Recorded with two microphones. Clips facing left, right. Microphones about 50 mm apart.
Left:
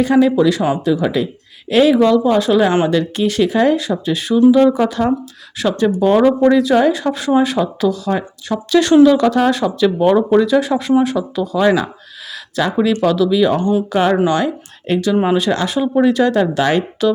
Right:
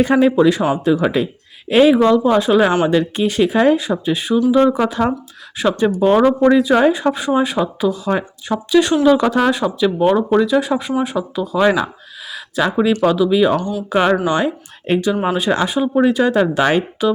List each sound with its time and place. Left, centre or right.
0.0 s speech: right
7.3 s speech: centre
8.5 s speech: centre
9.0 s speech: centre
12.3 s a sound: centre
12.9 s speech: right
13.6 s speech: left
14.3 s speech: centre